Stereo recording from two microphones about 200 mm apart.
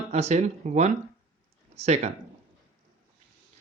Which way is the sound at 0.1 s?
35° right (ahead or behind).